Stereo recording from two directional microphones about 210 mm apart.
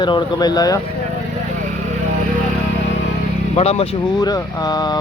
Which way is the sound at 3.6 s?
30° left (ahead or behind).